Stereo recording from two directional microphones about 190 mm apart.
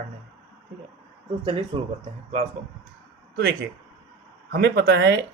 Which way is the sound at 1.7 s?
25° right (ahead or behind).